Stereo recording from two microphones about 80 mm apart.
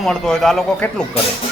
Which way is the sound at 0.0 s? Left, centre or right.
Centre.